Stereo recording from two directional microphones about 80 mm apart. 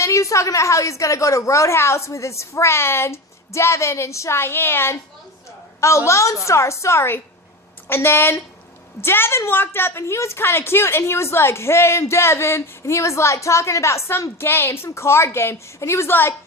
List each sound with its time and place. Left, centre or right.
0.0 s a woman's voice: left
6.1 s a woman's voice: left